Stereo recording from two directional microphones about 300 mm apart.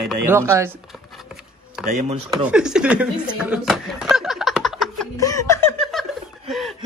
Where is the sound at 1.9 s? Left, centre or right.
Right.